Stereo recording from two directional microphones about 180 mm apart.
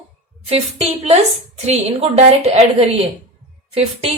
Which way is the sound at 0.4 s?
35° right (ahead or behind).